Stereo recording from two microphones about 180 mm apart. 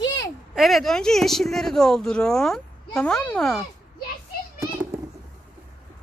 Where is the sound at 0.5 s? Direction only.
Centre (ahead or behind).